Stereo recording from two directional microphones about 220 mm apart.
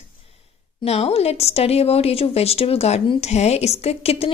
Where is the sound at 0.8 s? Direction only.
30° left (ahead or behind).